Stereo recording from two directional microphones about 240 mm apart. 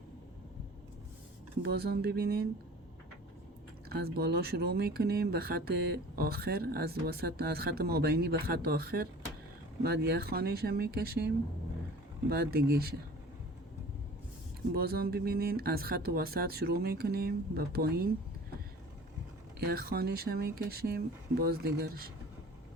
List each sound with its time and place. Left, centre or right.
1.6 s speech: right
3.8 s speech: right
14.7 s speech: right
19.5 s speech: right